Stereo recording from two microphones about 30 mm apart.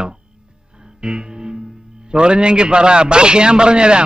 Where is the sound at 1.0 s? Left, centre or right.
Right.